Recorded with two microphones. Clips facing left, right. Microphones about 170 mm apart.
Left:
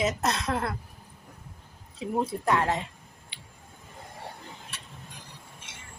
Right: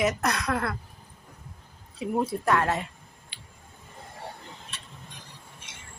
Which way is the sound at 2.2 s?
20° left (ahead or behind).